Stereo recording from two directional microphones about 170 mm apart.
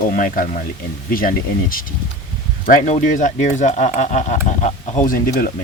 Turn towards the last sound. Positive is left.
turn(degrees=55)  # may be behind; listen again after turning